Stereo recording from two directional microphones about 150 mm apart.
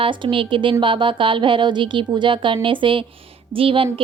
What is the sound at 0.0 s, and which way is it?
A woman's voice, 35° right (ahead or behind).